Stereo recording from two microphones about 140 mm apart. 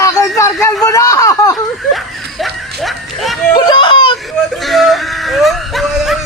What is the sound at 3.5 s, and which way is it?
Speech, 35° left (ahead or behind).